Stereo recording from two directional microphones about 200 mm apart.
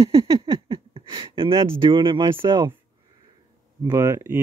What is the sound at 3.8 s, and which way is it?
Speech, 15° right (ahead or behind).